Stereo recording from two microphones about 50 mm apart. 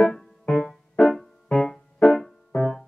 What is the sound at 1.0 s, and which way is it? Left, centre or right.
Music, centre.